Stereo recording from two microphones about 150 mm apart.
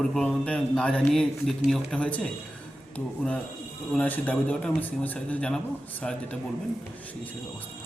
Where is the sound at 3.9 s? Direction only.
10° left (ahead or behind).